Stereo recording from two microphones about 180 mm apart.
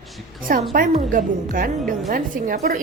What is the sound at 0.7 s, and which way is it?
A woman's voice, 50° right (ahead or behind).